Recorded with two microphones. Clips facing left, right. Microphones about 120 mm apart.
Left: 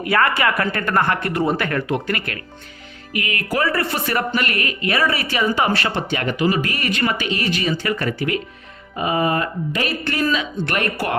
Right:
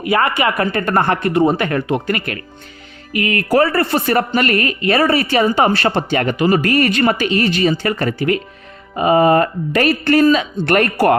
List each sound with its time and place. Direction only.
0.0 s speech: 20° right (ahead or behind); by 6.0 s 35° right (ahead or behind)
6.1 s speech: 50° right (ahead or behind)
7.5 s speech: 40° right (ahead or behind)
9.0 s speech: 45° right (ahead or behind)